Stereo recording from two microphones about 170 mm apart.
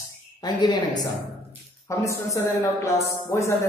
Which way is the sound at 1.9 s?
20° left (ahead or behind).